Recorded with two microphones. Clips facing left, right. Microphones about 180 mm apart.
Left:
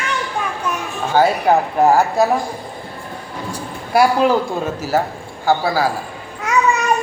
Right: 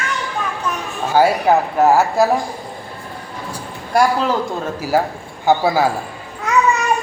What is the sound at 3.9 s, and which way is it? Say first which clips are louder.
Speech: left 1 dB; 5° left (ahead or behind).